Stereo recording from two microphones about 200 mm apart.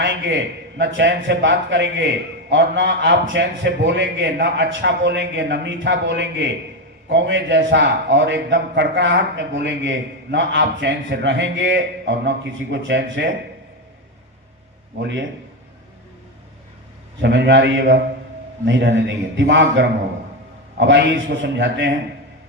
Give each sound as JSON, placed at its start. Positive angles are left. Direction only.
{"t": 0.0, "sound": "a man's voice", "side_deg": -65}
{"t": 15.0, "sound": "a man's voice", "side_deg": -60}
{"t": 17.2, "sound": "a man's voice", "side_deg": -60}